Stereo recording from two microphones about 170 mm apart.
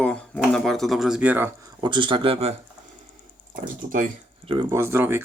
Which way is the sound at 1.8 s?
30° right (ahead or behind).